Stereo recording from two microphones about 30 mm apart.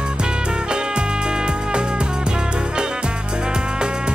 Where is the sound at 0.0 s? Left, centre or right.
Right.